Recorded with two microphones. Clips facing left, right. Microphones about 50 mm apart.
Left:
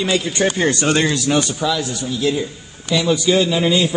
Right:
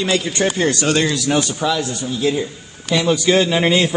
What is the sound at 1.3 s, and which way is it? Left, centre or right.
A man's voice, right.